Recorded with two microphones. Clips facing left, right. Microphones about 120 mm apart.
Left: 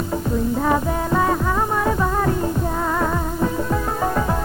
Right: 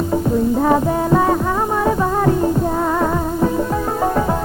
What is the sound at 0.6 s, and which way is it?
Music, 25° right (ahead or behind).